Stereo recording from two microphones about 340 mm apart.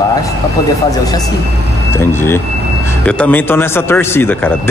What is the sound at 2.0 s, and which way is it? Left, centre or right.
Speech, centre.